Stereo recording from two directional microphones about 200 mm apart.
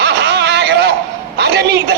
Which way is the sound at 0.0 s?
55° right (ahead or behind).